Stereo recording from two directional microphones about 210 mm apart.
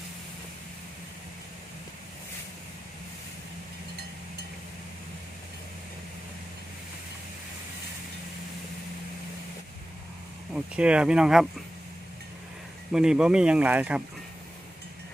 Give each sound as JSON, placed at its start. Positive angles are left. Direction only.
{"t": 10.5, "sound": "speech", "side_deg": -5}
{"t": 12.9, "sound": "speech", "side_deg": -5}